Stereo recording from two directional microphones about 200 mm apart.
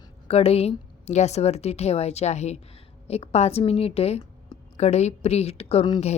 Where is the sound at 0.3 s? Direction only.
30° left (ahead or behind).